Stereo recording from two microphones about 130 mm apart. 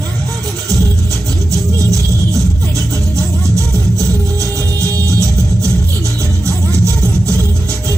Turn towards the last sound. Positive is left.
turn(degrees=-20)  # may be behind; listen again after turning